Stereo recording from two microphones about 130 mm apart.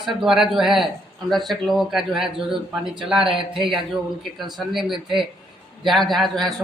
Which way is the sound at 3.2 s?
40° right (ahead or behind).